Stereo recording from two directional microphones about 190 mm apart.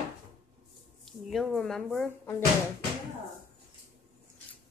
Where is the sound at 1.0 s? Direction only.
Centre (ahead or behind).